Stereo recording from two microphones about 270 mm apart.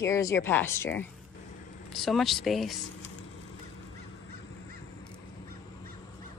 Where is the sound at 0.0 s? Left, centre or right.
Centre.